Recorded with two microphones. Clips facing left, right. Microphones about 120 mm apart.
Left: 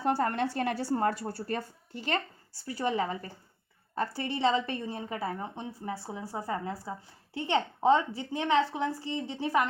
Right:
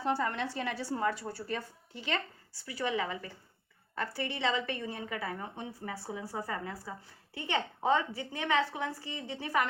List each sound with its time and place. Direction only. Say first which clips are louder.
0.0 s a woman's voice: left 4 dB; 50° left (ahead or behind); by 9.6 s 25° left (ahead or behind)